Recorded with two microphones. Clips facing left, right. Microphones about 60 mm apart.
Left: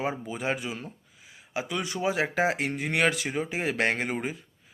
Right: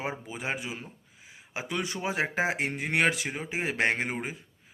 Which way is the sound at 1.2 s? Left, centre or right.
Right.